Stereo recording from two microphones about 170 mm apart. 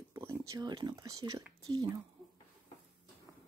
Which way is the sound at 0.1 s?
15° right (ahead or behind).